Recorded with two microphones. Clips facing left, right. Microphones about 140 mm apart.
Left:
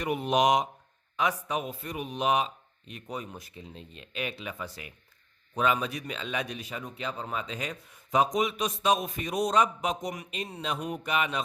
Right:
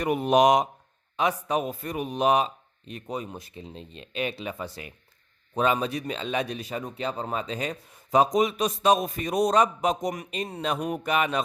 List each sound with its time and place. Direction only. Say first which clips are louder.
0.0 s speech: right 5 dB; 45° right (ahead or behind)
1.1 s speech: right 4 dB; 30° right (ahead or behind)
3.1 s speech: right 4 dB; 25° right (ahead or behind); by 11.4 s 45° right (ahead or behind)